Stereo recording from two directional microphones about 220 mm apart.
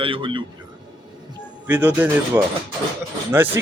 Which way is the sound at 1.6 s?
10° right (ahead or behind).